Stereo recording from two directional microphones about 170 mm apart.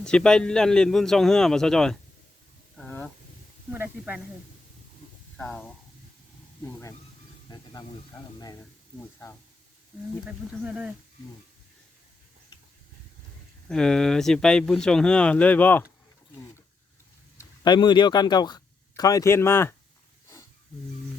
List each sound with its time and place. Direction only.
0.0 s speech: 5° left (ahead or behind)
2.7 s a sound: 10° left (ahead or behind)
3.7 s speech: 10° right (ahead or behind)
5.4 s speech: 5° left (ahead or behind)
7.5 s speech: 20° left (ahead or behind)
10.6 s speech: 5° right (ahead or behind)
13.7 s speech: 5° left (ahead or behind)
17.3 s speech: 25° left (ahead or behind)